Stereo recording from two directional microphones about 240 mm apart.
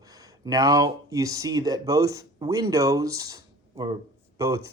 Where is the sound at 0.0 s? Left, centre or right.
Centre.